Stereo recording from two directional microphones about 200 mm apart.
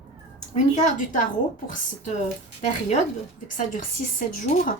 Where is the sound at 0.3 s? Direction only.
35° left (ahead or behind).